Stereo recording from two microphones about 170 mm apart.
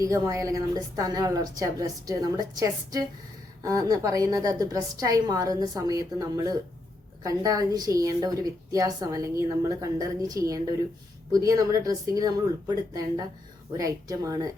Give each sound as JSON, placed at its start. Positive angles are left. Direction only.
{"t": 0.0, "sound": "a woman's voice", "side_deg": -20}